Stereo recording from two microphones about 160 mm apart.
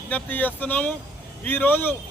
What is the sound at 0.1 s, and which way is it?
A man's voice, 10° left (ahead or behind).